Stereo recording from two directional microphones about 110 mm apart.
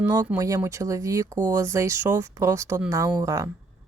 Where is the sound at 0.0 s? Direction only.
30° right (ahead or behind).